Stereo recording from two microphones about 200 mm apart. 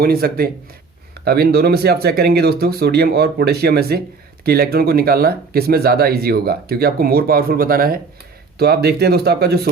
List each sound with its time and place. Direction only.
0.0 s speech: 50° right (ahead or behind)